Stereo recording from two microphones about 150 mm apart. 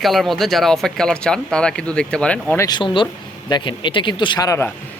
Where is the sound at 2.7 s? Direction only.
35° left (ahead or behind).